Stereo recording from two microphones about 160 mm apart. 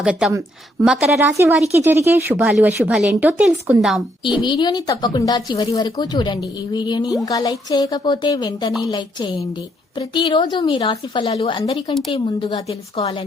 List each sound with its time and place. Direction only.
0.0 s a woman's voice: 5° right (ahead or behind)
1.7 s a woman's voice: 15° right (ahead or behind)
4.2 s a woman's voice: 30° left (ahead or behind)